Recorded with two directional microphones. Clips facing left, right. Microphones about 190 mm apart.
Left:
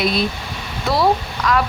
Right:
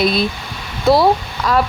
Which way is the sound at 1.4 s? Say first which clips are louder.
Right 1 dB; 30° right (ahead or behind).